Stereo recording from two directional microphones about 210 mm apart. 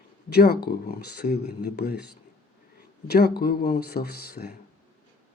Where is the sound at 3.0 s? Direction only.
50° left (ahead or behind).